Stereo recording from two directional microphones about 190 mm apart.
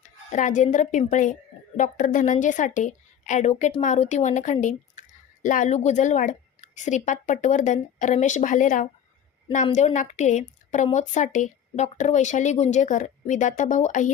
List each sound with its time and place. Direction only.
0.3 s speech: 40° left (ahead or behind)